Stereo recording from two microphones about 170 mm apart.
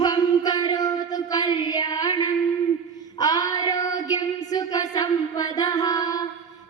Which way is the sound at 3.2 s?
20° left (ahead or behind).